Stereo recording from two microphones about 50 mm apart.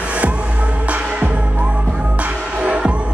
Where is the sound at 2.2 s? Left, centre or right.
Right.